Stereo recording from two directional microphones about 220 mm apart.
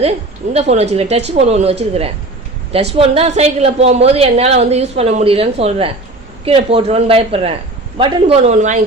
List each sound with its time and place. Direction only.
0.5 s a woman's voice: 30° right (ahead or behind)